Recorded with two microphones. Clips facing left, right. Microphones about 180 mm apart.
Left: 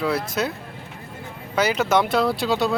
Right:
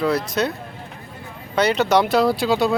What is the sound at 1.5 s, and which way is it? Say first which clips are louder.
Speech: right 3 dB; 5° left (ahead or behind).